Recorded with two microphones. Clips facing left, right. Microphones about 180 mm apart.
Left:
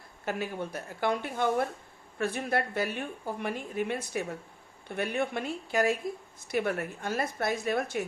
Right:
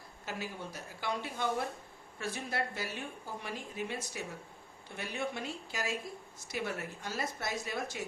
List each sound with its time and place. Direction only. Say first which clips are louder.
0.3 s a woman's voice: left 8 dB; 60° left (ahead or behind)